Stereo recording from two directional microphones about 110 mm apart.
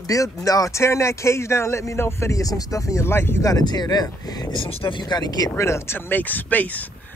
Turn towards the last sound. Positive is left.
turn(degrees=15)  # may be behind; listen again after turning